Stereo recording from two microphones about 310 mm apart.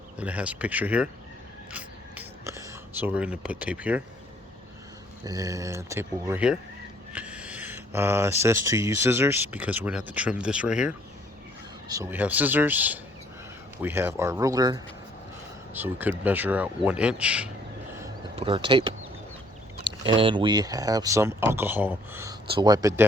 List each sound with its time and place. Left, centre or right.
0.2 s speech: centre
1.7 s a sound: centre
5.2 s speech: centre
18.3 s speech: centre
20.1 s speech: centre